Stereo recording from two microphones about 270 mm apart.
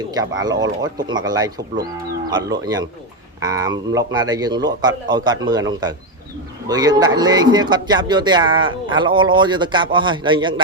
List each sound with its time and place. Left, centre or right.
0.4 s a man's voice: centre